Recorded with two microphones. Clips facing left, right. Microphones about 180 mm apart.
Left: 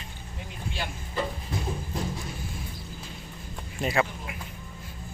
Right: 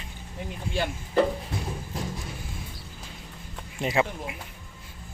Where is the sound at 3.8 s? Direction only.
20° right (ahead or behind).